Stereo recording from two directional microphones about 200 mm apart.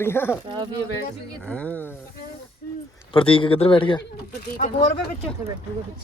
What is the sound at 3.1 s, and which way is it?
Speech, 25° left (ahead or behind).